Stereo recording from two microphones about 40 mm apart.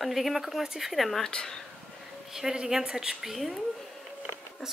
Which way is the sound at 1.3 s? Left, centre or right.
Centre.